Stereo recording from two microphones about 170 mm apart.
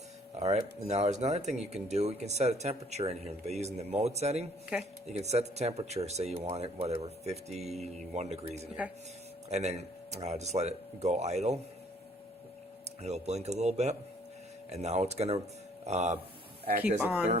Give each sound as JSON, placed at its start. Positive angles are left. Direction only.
{"t": 0.3, "sound": "speech", "side_deg": -40}
{"t": 4.7, "sound": "speech", "side_deg": -5}
{"t": 5.0, "sound": "speech", "side_deg": -40}
{"t": 13.0, "sound": "speech", "side_deg": -40}
{"t": 17.0, "sound": "speech", "side_deg": -10}